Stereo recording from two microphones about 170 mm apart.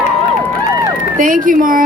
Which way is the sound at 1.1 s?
50° right (ahead or behind).